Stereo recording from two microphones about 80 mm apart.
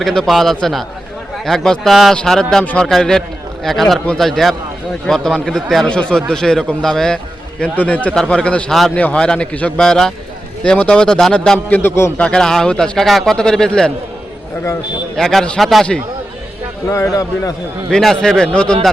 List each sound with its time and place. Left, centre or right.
0.0 s a man's voice: centre
7.6 s a man's voice: centre
8.1 s speech: centre
11.7 s a man's voice: left
12.1 s speech: centre
15.1 s a man's voice: centre
16.9 s a man's voice: left
17.9 s speech: centre